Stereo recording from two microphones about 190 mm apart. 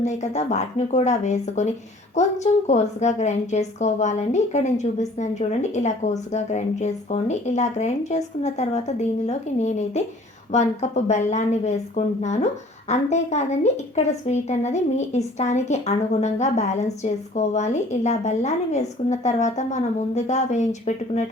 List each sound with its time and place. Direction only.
0.0 s a woman's voice: 35° left (ahead or behind)